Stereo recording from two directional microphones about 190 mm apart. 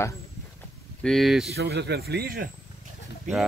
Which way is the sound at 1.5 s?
60° right (ahead or behind).